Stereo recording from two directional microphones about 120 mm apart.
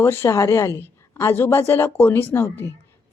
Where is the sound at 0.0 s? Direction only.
20° left (ahead or behind).